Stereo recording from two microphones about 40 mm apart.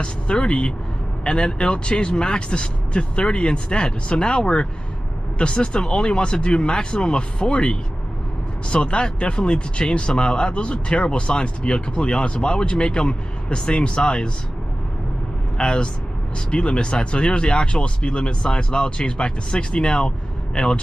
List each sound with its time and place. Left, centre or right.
0.0 s speech: left
15.5 s speech: left